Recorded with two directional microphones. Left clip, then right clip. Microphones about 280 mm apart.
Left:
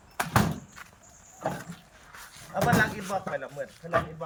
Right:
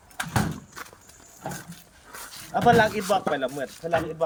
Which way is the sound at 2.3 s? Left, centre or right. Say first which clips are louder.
Right 7 dB; right.